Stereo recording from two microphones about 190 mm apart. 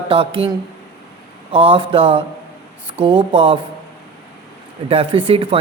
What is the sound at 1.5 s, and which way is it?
Speech, 30° right (ahead or behind).